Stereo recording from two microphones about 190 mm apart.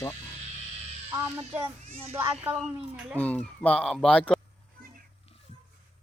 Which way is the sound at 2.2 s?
10° right (ahead or behind).